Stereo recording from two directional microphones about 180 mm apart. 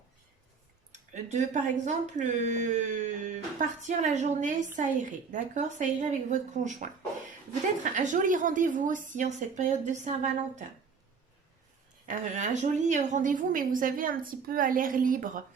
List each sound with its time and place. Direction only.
1.1 s a woman's voice: 40° right (ahead or behind)
12.0 s a woman's voice: 40° right (ahead or behind)